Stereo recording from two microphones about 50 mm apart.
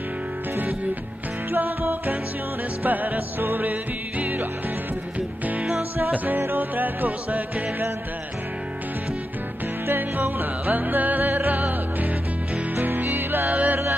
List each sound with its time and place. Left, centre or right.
1.5 s music: right
9.8 s music: right